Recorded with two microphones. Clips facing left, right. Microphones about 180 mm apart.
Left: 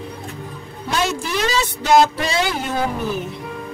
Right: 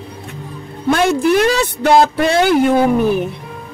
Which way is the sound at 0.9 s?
55° right (ahead or behind).